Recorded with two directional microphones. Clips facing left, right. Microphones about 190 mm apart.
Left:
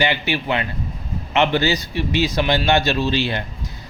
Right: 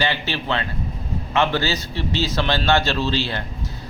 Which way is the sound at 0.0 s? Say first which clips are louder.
Left 3 dB; 15° left (ahead or behind).